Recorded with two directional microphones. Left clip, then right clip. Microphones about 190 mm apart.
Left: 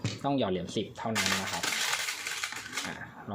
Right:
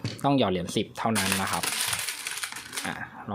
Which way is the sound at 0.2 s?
30° right (ahead or behind).